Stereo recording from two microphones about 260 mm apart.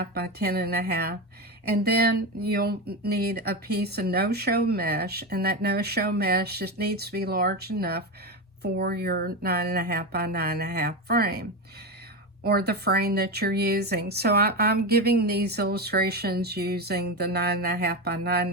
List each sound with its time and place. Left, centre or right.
0.0 s speech: right